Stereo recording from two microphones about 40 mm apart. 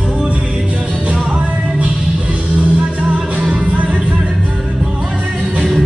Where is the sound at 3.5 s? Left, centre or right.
Right.